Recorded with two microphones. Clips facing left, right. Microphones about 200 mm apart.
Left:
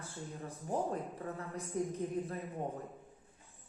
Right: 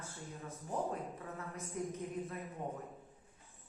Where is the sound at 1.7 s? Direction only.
35° left (ahead or behind).